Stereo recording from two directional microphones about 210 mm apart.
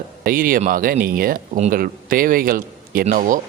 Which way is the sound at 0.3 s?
40° right (ahead or behind).